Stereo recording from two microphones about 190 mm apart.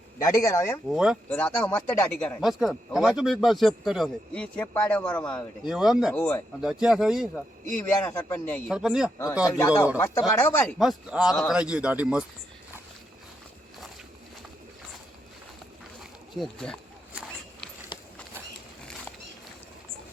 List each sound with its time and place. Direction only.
0.2 s speech: 15° left (ahead or behind)
0.9 s speech: 5° right (ahead or behind)
1.3 s speech: 5° left (ahead or behind)
6.6 s speech: 5° right (ahead or behind)
7.8 s speech: 15° left (ahead or behind)
8.7 s speech: 5° right (ahead or behind)
9.6 s speech: 15° left (ahead or behind)
10.8 s speech: centre (ahead or behind)
16.3 s speech: centre (ahead or behind)
17.1 s a sound: 5° right (ahead or behind)
17.9 s clip-clop: 20° left (ahead or behind)